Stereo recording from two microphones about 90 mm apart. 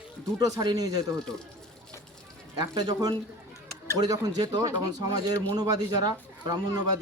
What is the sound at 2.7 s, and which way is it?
A man's voice, 50° right (ahead or behind).